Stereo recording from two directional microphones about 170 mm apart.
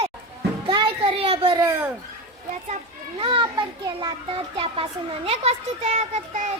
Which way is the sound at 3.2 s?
30° right (ahead or behind).